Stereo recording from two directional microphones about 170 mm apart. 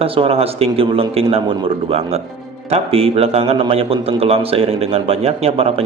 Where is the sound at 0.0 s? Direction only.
35° right (ahead or behind).